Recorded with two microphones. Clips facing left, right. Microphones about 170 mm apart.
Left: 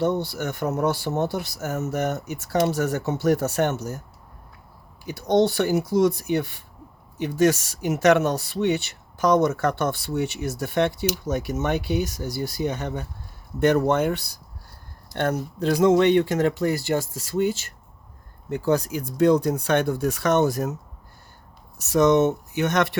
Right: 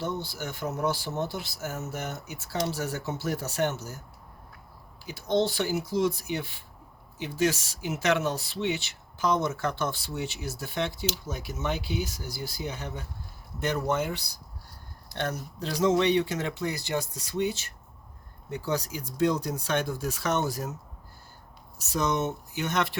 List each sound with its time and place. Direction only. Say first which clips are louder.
0.0 s speech: left 9 dB; 70° left (ahead or behind)
0.9 s speech: left 6 dB; 60° left (ahead or behind)
5.2 s speech: left 6 dB; 60° left (ahead or behind); by 8.7 s 45° left (ahead or behind)
9.2 s speech: left 7 dB; 65° left (ahead or behind)
11.6 s speech: left 4 dB; 60° left (ahead or behind)
18.5 s speech: left 8 dB; 55° left (ahead or behind)
21.9 s speech: left 10 dB; 75° left (ahead or behind)